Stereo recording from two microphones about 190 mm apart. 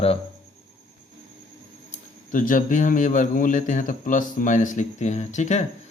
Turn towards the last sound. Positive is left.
turn(degrees=40)  # may be behind; listen again after turning